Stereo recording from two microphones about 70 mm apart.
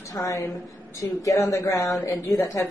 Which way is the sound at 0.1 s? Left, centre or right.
Left.